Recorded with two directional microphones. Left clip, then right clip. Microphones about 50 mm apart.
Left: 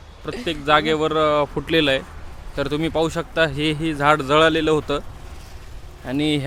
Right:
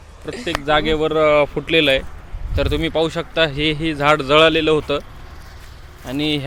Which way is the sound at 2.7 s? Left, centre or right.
Left.